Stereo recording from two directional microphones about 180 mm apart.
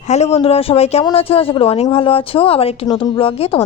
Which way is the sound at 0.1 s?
35° left (ahead or behind).